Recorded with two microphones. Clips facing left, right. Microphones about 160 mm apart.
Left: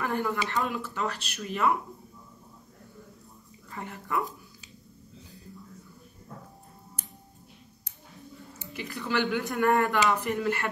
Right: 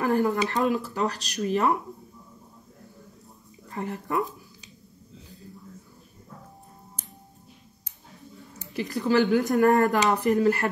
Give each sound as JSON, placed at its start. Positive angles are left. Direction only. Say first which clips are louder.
{"t": 0.0, "sound": "a sound", "louder": "right 6 dB", "side_deg": -40}
{"t": 0.5, "sound": "speech", "louder": "right 6 dB", "side_deg": -40}
{"t": 3.7, "sound": "speech", "louder": "right 4 dB", "side_deg": -40}
{"t": 8.5, "sound": "speech", "louder": "right 8 dB", "side_deg": -40}